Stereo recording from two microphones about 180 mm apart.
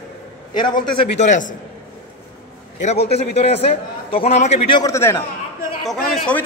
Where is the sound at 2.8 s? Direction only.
35° left (ahead or behind).